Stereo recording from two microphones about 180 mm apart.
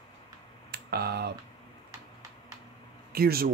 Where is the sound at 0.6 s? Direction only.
60° right (ahead or behind).